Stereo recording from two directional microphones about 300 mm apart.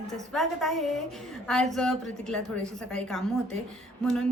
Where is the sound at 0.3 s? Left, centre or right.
Centre.